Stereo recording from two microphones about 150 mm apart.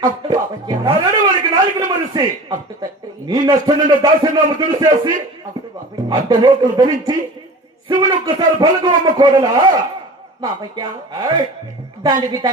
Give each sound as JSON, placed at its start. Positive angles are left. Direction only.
{"t": 0.0, "sound": "a man's voice", "side_deg": -25}